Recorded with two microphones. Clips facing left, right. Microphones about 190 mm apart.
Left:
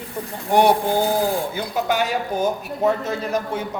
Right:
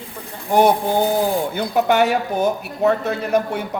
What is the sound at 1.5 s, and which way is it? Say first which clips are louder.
Speech: right 5 dB; 60° right (ahead or behind).